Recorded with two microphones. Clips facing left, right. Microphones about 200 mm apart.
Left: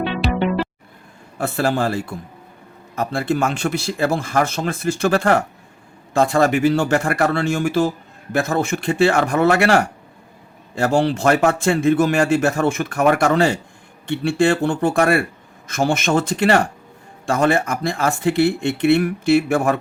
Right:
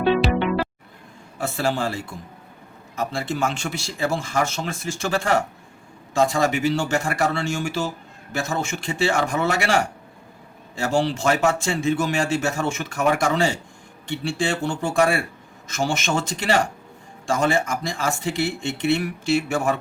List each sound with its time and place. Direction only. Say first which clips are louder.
0.2 s music: even; centre (ahead or behind)
1.4 s speech: left 4 dB; 60° left (ahead or behind)